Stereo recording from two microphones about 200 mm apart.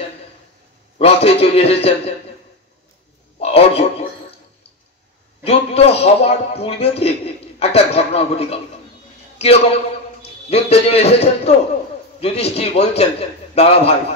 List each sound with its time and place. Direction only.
0.9 s a man's voice: 30° left (ahead or behind)
3.3 s a sound: 30° left (ahead or behind)
5.4 s a man's voice: 30° left (ahead or behind)